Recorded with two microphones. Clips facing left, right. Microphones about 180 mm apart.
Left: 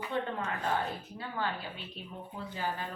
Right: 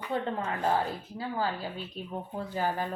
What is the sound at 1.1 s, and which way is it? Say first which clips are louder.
A woman's voice: right 6 dB; 35° right (ahead or behind).